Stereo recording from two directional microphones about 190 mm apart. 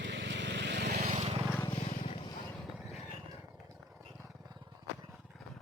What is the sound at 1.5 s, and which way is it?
Vehicle, 20° left (ahead or behind).